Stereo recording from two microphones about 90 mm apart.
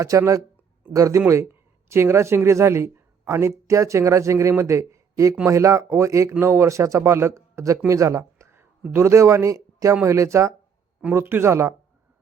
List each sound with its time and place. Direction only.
0.0 s a man's voice: 35° right (ahead or behind)
7.9 s a sound: 35° right (ahead or behind)
8.9 s a man's voice: 30° right (ahead or behind)